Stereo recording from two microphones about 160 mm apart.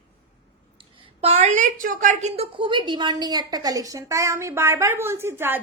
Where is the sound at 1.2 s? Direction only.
40° right (ahead or behind).